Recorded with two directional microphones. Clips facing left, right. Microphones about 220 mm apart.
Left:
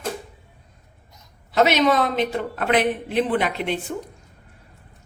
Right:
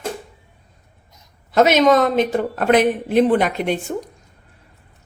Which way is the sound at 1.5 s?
50° right (ahead or behind).